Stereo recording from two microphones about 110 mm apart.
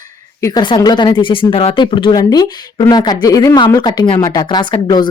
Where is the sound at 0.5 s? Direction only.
45° left (ahead or behind).